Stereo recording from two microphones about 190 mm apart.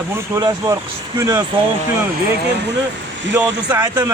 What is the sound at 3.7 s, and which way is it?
Speech, 20° right (ahead or behind).